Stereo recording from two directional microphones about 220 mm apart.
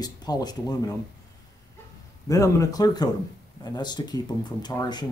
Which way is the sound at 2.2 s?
15° left (ahead or behind).